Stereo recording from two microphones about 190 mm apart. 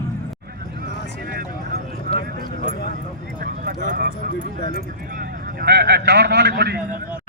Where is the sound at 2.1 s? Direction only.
55° right (ahead or behind).